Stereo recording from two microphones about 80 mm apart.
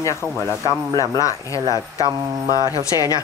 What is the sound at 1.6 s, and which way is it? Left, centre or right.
Speech, right.